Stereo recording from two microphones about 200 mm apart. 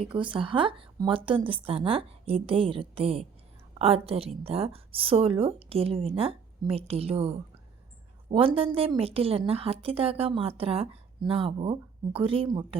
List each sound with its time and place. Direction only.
0.0 s a woman's voice: 25° right (ahead or behind)